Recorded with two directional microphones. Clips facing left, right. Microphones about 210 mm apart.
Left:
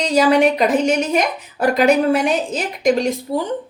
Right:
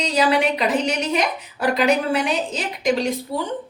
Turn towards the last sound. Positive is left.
turn(degrees=45)  # may be behind; listen again after turning